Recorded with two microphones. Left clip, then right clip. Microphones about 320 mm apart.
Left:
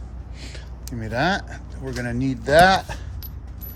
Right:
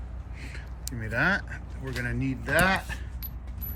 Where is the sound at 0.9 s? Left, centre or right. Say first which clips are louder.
Left 3 dB; centre.